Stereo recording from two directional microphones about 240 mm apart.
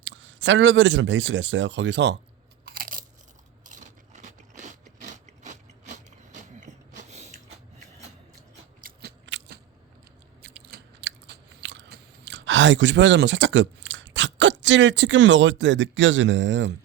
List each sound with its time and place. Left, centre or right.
0.0 s speech: right
2.6 s crunch: right
3.7 s a sound: right
8.8 s scissors: right
10.4 s biting: right